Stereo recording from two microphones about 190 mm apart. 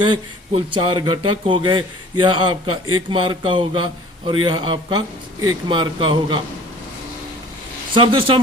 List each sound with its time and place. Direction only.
0.0 s speech: 25° right (ahead or behind)
7.9 s speech: 25° right (ahead or behind)